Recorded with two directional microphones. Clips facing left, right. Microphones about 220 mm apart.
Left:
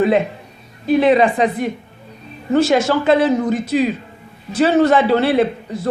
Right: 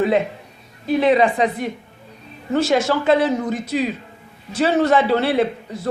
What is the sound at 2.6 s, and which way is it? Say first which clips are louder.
A man's voice: left 2 dB; 90° left.